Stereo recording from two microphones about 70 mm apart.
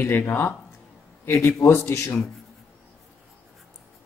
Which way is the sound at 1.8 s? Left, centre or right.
Left.